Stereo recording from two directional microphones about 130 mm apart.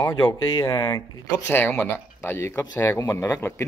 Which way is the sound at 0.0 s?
30° left (ahead or behind).